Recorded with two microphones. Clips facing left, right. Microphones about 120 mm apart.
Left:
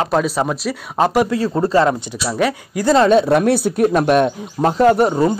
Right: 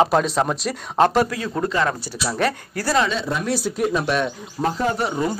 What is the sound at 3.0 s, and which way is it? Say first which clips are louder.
Speech: left 11 dB; 55° left (ahead or behind).